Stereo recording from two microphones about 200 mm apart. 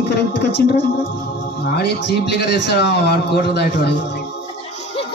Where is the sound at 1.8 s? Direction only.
55° left (ahead or behind).